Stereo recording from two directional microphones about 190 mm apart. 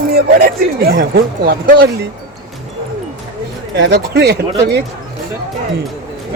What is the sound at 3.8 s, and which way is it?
Speech, 60° right (ahead or behind).